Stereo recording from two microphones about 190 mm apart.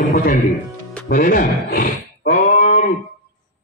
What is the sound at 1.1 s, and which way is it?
Speech, 45° left (ahead or behind).